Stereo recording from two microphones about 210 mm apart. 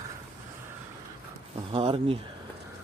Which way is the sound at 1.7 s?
25° right (ahead or behind).